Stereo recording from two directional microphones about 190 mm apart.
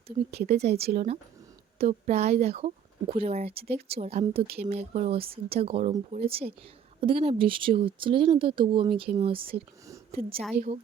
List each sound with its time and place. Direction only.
0.5 s speech: 60° right (ahead or behind)
0.9 s speech: 35° right (ahead or behind)